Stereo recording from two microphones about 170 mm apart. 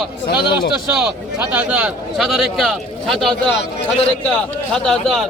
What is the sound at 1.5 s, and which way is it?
Speech, 10° right (ahead or behind).